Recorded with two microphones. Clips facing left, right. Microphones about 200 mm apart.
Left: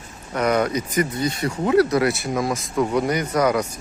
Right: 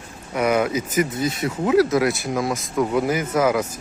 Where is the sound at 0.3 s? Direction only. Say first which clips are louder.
Even; 5° right (ahead or behind).